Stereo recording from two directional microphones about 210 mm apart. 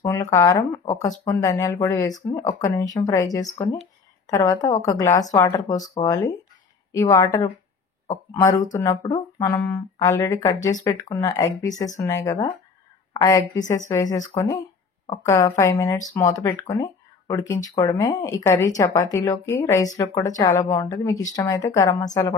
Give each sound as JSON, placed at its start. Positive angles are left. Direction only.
{"t": 0.0, "sound": "a woman's voice", "side_deg": 15}